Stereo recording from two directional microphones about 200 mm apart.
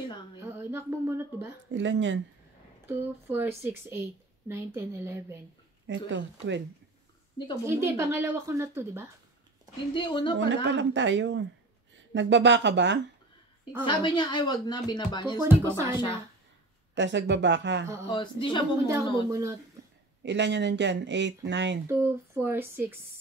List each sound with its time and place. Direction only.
0.4 s a sound: 10° right (ahead or behind)
1.7 s speech: 65° right (ahead or behind)
2.9 s speech: 10° right (ahead or behind)
5.9 s speech: 65° right (ahead or behind)
7.6 s speech: 15° right (ahead or behind)
9.9 s speech: 25° left (ahead or behind)
10.5 s speech: 65° right (ahead or behind)
13.8 s speech: 20° left (ahead or behind)
15.4 s speech: 10° right (ahead or behind)
16.9 s speech: 65° right (ahead or behind)
18.0 s speech: 25° left (ahead or behind)
19.2 s speech: 15° right (ahead or behind)
20.2 s speech: 60° right (ahead or behind)
21.8 s speech: 10° right (ahead or behind)